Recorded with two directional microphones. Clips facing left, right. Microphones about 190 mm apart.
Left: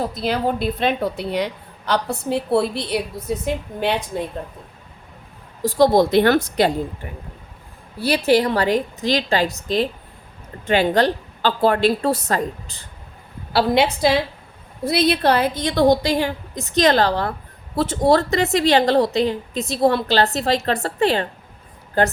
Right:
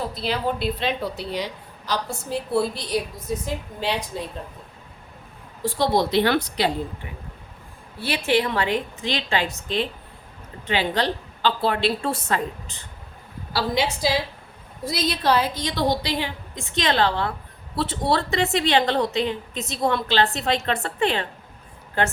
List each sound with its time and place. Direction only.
0.0 s a woman's voice: 45° left (ahead or behind)
5.6 s a woman's voice: 45° left (ahead or behind)
13.5 s a woman's voice: 60° left (ahead or behind); by 22.1 s 35° left (ahead or behind)